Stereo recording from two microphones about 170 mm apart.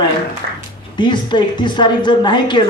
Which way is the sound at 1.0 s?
25° left (ahead or behind).